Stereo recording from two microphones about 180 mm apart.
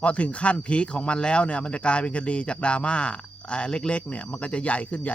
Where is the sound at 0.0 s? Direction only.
5° left (ahead or behind).